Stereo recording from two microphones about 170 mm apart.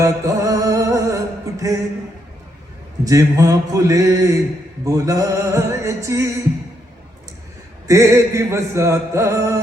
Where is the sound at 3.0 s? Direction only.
20° right (ahead or behind).